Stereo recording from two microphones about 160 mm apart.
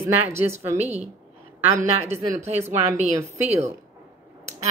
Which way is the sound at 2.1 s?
20° right (ahead or behind).